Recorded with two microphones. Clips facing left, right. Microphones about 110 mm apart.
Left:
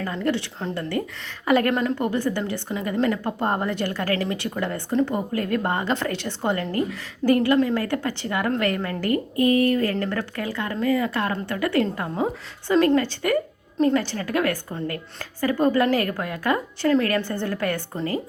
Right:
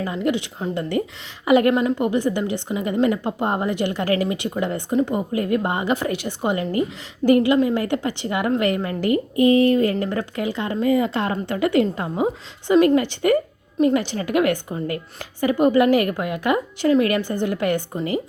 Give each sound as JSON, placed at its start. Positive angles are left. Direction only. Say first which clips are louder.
{"t": 0.0, "sound": "a woman's voice", "louder": "right 2 dB", "side_deg": -15}